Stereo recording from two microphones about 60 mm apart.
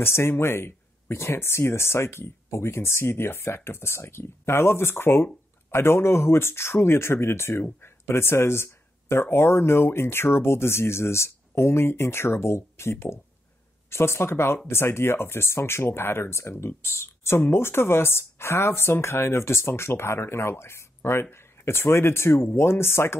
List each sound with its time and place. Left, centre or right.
0.0 s speech: left